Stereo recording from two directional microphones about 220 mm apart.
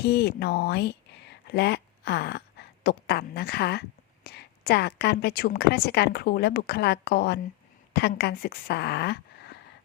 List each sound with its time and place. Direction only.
0.0 s speech: 50° left (ahead or behind)